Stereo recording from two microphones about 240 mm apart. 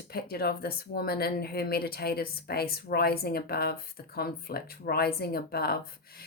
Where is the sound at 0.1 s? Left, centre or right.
Left.